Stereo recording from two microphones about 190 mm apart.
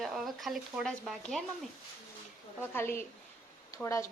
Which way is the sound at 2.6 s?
10° left (ahead or behind).